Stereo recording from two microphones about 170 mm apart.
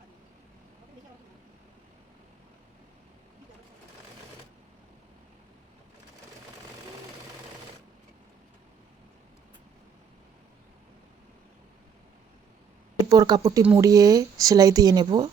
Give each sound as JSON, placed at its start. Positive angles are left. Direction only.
{"t": 13.1, "sound": "speech", "side_deg": -25}